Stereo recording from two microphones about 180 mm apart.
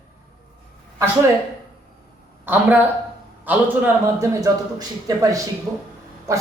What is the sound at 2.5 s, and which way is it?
A man's voice, 10° right (ahead or behind).